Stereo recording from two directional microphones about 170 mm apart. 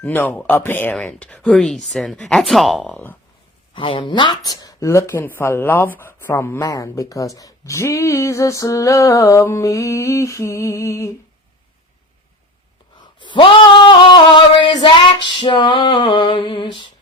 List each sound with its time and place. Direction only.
0.0 s speech: 10° left (ahead or behind)
3.8 s speech: 30° left (ahead or behind)
13.1 s female singing: 30° left (ahead or behind)